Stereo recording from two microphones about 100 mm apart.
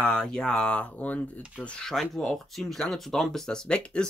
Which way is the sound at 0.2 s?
5° left (ahead or behind).